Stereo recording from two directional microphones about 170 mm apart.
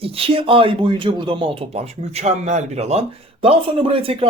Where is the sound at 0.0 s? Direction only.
35° right (ahead or behind).